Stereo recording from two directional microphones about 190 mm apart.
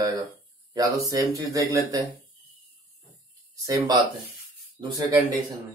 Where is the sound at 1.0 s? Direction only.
20° right (ahead or behind).